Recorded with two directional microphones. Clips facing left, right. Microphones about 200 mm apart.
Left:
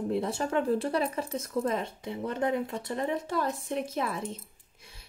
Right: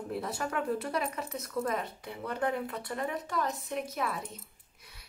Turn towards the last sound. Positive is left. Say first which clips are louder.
# left 3 dB
turn(degrees=25)  # may be behind; listen again after turning